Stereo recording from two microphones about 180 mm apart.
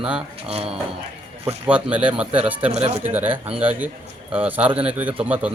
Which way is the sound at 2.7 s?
40° right (ahead or behind).